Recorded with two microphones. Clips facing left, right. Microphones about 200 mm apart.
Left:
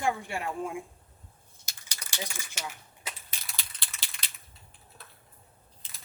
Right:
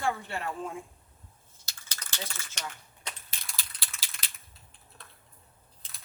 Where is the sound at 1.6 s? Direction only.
15° left (ahead or behind).